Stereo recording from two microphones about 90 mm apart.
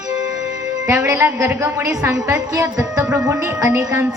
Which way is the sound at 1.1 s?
30° right (ahead or behind).